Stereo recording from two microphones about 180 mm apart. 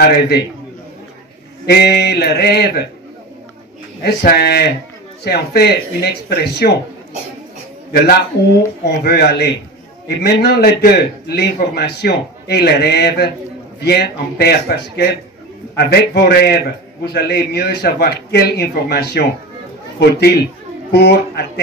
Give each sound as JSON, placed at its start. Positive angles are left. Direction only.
{"t": 0.0, "sound": "a man's voice", "side_deg": 60}
{"t": 1.7, "sound": "a man's voice", "side_deg": 65}
{"t": 4.0, "sound": "a man's voice", "side_deg": 60}
{"t": 7.9, "sound": "a man's voice", "side_deg": 60}